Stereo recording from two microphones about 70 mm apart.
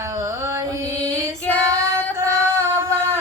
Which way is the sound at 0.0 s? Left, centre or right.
Right.